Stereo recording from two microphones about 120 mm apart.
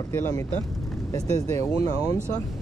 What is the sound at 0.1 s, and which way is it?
Speech, 25° left (ahead or behind).